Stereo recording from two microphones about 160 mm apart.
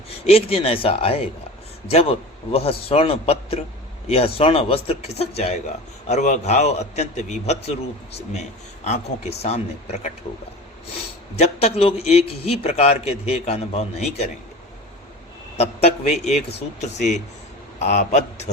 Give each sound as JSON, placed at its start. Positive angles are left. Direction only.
{"t": 0.3, "sound": "a man's voice", "side_deg": 40}
{"t": 11.3, "sound": "a man's voice", "side_deg": 40}
{"t": 15.5, "sound": "a man's voice", "side_deg": 40}